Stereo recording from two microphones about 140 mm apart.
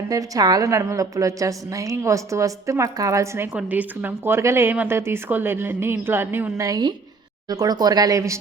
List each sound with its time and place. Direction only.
0.1 s a woman's voice: 25° right (ahead or behind)